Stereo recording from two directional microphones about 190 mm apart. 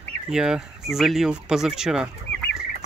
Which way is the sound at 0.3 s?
5° right (ahead or behind).